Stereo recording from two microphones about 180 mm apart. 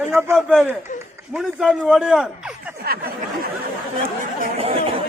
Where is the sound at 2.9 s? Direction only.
55° right (ahead or behind).